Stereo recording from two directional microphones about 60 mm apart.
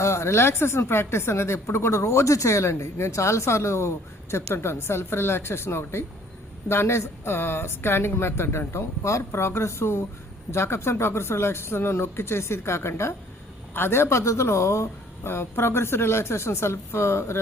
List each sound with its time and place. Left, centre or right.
0.0 s a woman's voice: left